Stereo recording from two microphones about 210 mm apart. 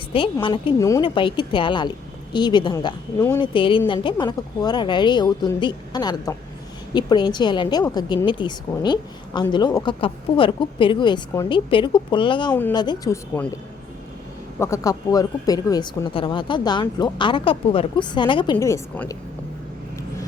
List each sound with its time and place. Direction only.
0.4 s a woman's voice: 25° left (ahead or behind)
3.5 s a woman's voice: 25° left (ahead or behind)
14.6 s a woman's voice: 15° left (ahead or behind)
18.5 s speech: 10° left (ahead or behind)